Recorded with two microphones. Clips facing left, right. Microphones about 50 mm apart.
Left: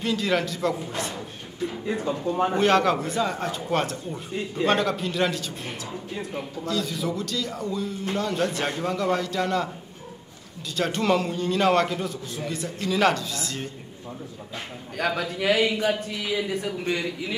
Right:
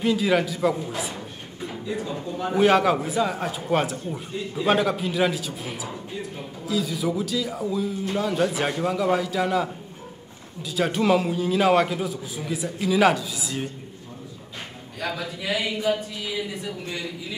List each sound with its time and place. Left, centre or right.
0.0 s a man's voice: centre
1.9 s speech: left
2.5 s a man's voice: centre
10.8 s a man's voice: centre
15.0 s speech: left